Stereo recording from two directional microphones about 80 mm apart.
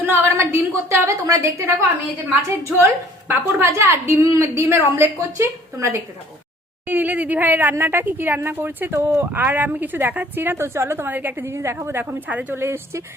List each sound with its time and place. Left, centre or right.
0.0 s a woman's voice: right
12.5 s a woman's voice: right